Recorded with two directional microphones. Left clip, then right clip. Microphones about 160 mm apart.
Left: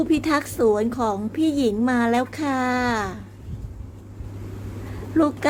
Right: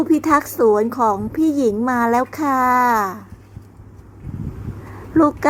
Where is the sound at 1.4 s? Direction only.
90° right.